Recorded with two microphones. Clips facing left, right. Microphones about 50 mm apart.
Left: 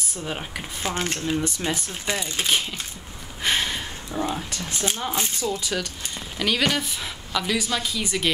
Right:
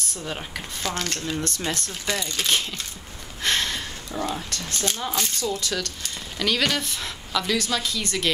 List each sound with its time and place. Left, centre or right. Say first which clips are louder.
0.0 s speech: left 1 dB; centre
0.8 s speech: left 2 dB; left
1.3 s speech: left 2 dB; centre